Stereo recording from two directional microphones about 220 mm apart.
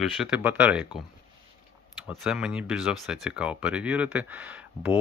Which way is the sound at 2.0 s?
5° right (ahead or behind).